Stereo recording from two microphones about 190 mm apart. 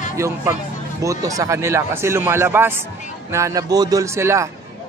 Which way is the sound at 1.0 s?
15° right (ahead or behind).